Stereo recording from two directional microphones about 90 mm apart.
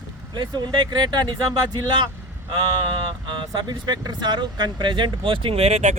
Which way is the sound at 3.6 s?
55° right (ahead or behind).